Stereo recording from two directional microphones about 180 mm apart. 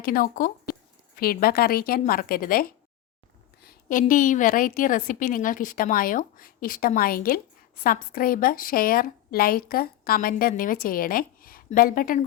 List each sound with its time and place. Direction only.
0.0 s a woman's voice: 50° left (ahead or behind)